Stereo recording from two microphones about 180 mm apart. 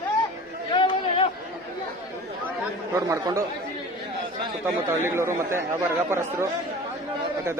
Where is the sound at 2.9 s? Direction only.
20° right (ahead or behind).